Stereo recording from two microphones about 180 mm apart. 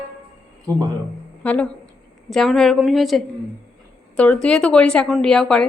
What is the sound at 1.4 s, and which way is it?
A woman's voice, 5° left (ahead or behind).